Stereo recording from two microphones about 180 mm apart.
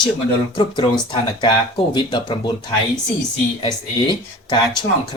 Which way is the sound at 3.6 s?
25° left (ahead or behind).